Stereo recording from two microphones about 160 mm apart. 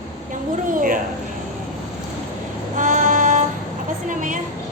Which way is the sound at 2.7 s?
55° right (ahead or behind).